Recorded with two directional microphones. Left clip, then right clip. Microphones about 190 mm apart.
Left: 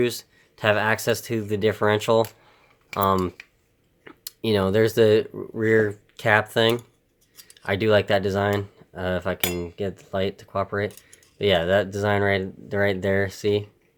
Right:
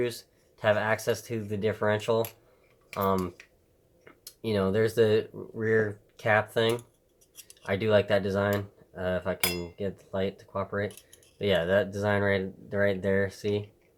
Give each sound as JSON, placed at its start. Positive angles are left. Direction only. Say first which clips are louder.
{"t": 0.0, "sound": "speech", "louder": "left 7 dB", "side_deg": 40}